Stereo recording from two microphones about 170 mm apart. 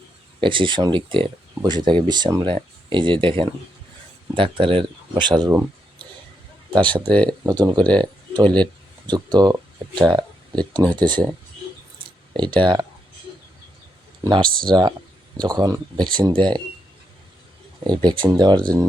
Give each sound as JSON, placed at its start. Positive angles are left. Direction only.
{"t": 0.3, "sound": "speech", "side_deg": -30}
{"t": 6.7, "sound": "speech", "side_deg": -30}
{"t": 8.0, "sound": "a sound", "side_deg": -25}
{"t": 9.0, "sound": "speech", "side_deg": -25}
{"t": 12.4, "sound": "speech", "side_deg": -30}
{"t": 14.3, "sound": "speech", "side_deg": -30}
{"t": 17.8, "sound": "speech", "side_deg": -25}